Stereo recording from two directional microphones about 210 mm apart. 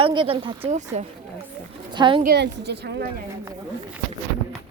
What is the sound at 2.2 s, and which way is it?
Speech, 55° right (ahead or behind).